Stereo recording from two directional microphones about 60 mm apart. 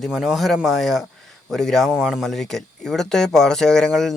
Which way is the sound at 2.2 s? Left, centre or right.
Centre.